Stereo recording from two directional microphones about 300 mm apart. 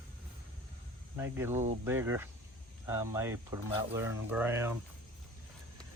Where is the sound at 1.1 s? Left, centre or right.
Centre.